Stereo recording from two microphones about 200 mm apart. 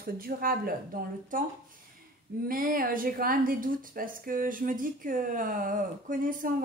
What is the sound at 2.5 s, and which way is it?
Speech, 45° right (ahead or behind).